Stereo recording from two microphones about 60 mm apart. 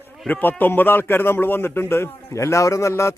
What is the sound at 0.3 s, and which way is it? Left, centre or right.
A man's voice, left.